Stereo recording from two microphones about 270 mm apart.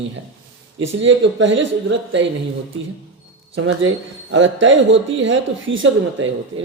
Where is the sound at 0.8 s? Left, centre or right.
Right.